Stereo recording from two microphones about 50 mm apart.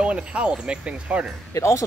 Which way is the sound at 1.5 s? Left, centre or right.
Left.